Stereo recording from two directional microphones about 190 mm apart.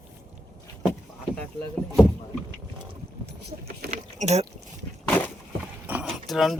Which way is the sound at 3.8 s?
40° right (ahead or behind).